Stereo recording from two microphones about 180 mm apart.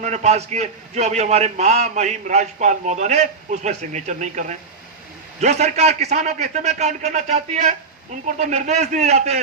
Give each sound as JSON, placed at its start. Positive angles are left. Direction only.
{"t": 0.0, "sound": "a man's voice", "side_deg": -40}